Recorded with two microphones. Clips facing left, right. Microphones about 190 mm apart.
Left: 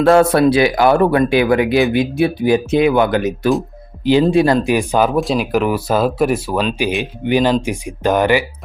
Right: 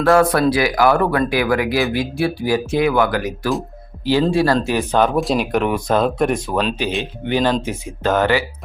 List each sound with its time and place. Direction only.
0.0 s speech: 25° left (ahead or behind)